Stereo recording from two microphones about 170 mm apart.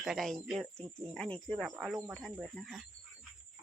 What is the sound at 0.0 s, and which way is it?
Speech, centre (ahead or behind).